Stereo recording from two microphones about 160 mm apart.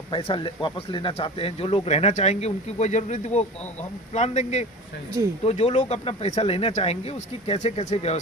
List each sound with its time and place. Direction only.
0.1 s speech: 35° left (ahead or behind)